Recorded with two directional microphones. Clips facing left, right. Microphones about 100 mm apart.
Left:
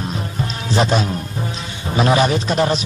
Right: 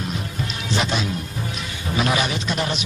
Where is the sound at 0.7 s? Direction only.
40° left (ahead or behind).